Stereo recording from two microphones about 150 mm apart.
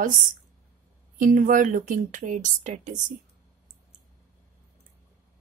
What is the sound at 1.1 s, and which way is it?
A woman's voice, 60° right (ahead or behind).